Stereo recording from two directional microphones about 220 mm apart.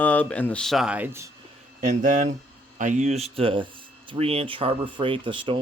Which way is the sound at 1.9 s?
35° right (ahead or behind).